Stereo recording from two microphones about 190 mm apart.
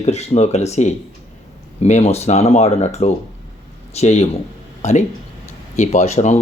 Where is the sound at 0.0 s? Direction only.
35° left (ahead or behind).